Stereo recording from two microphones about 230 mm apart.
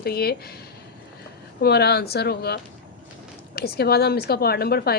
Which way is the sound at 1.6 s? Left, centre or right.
Left.